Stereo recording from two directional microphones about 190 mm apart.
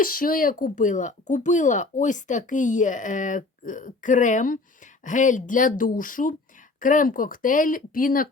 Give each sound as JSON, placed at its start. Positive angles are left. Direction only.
{"t": 0.0, "sound": "speech", "side_deg": 50}